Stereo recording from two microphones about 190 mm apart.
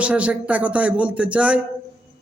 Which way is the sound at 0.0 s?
5° right (ahead or behind).